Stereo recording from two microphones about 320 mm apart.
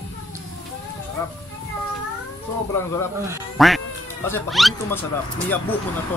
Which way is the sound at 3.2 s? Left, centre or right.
Centre.